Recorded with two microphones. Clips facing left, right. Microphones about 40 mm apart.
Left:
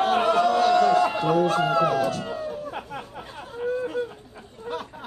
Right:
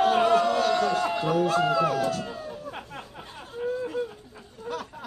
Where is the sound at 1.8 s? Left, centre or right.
Left.